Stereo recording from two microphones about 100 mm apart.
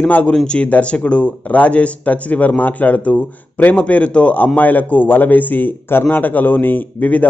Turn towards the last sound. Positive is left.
turn(degrees=15)  # may be behind; listen again after turning